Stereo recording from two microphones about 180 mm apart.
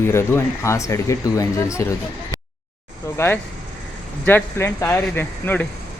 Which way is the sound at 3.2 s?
10° left (ahead or behind).